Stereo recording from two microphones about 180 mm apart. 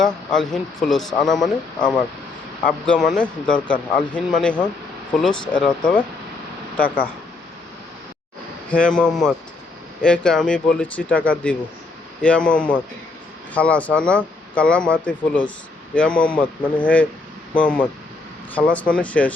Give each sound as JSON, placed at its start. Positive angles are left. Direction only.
{"t": 0.0, "sound": "speech", "side_deg": 5}
{"t": 6.8, "sound": "speech", "side_deg": 55}
{"t": 8.7, "sound": "speech", "side_deg": 5}